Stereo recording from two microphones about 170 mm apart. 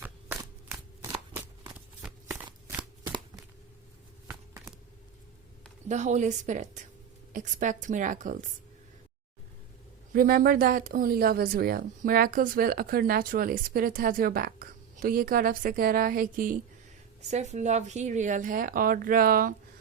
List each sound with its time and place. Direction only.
0.0 s a sound: 10° right (ahead or behind)
1.6 s shuffling cards: 10° right (ahead or behind)
4.3 s a sound: 15° right (ahead or behind)
5.9 s a woman's voice: 45° right (ahead or behind)
10.1 s speech: 60° right (ahead or behind)
17.3 s a woman's voice: 45° right (ahead or behind); by 19.5 s 60° right (ahead or behind)